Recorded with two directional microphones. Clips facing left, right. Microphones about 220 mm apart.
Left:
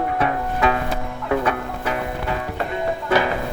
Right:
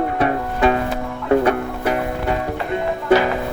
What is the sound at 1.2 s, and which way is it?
Music, 45° right (ahead or behind).